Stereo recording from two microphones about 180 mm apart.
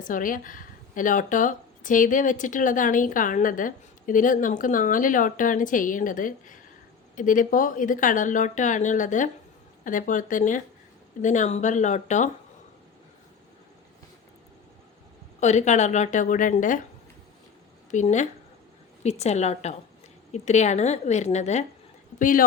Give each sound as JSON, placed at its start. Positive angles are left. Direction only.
{"t": 0.0, "sound": "a woman's voice", "side_deg": 50}
{"t": 15.4, "sound": "speech", "side_deg": 40}
{"t": 17.9, "sound": "a woman's voice", "side_deg": 40}